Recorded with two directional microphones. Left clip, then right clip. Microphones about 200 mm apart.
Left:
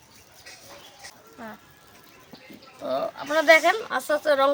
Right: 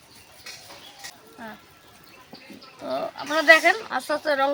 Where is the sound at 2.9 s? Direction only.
35° left (ahead or behind).